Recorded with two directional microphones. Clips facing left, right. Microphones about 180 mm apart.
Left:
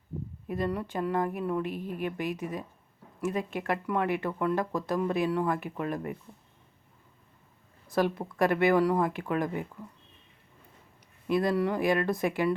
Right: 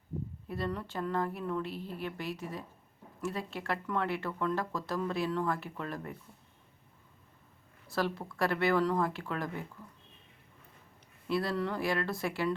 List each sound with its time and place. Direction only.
0.4 s speech: 15° left (ahead or behind)
7.9 s speech: 15° left (ahead or behind)
11.3 s speech: 15° left (ahead or behind)